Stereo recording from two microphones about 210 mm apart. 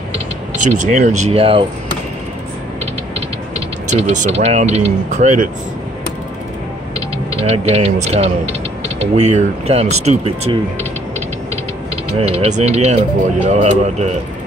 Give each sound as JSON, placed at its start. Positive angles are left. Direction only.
{"t": 0.9, "sound": "speech", "side_deg": -35}
{"t": 3.9, "sound": "speech", "side_deg": -35}
{"t": 7.4, "sound": "speech", "side_deg": -30}
{"t": 12.1, "sound": "speech", "side_deg": -30}